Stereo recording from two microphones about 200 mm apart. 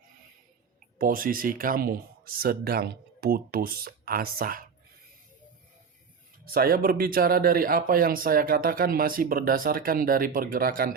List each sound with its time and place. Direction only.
0.9 s speech: 45° right (ahead or behind)
6.4 s speech: 45° right (ahead or behind)